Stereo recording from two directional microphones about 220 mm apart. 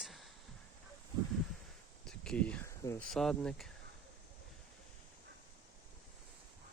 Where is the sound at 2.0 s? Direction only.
5° left (ahead or behind).